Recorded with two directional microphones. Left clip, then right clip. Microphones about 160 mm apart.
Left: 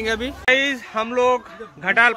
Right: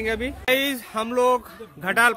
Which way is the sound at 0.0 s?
Centre (ahead or behind).